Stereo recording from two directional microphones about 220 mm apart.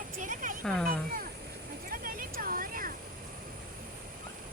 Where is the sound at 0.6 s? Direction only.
5° left (ahead or behind).